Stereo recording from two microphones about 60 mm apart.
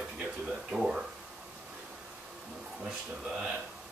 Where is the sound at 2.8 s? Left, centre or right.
Centre.